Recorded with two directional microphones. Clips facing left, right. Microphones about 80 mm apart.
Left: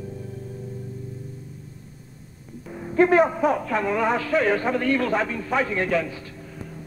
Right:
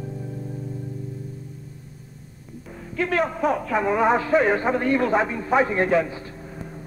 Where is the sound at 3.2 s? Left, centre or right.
Centre.